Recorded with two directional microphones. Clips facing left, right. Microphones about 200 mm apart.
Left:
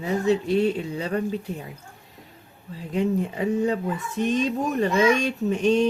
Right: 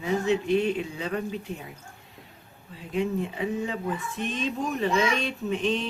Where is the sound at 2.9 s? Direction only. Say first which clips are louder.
Left 3 dB; 40° left (ahead or behind).